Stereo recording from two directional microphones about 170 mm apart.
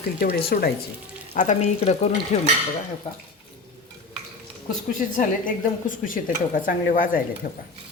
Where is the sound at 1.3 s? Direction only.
45° left (ahead or behind).